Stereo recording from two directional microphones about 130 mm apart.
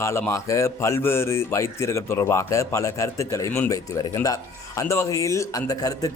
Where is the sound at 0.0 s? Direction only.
20° left (ahead or behind).